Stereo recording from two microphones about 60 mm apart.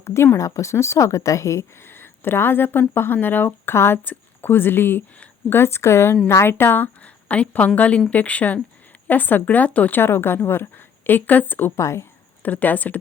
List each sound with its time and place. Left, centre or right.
0.0 s speech: left
0.3 s a woman's voice: left
1.9 s a woman's voice: left
10.0 s speech: left
11.8 s a woman's voice: left
12.4 s speech: left